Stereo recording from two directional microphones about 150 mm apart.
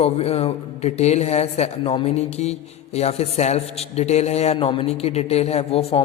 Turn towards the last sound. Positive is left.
turn(degrees=40)  # may be behind; listen again after turning